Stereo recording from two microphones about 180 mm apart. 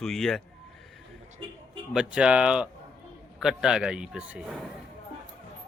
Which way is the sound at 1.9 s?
5° right (ahead or behind).